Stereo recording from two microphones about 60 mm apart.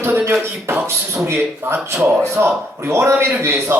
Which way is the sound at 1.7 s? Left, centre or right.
Right.